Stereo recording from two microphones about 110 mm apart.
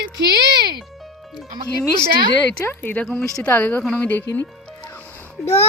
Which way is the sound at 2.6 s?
15° left (ahead or behind).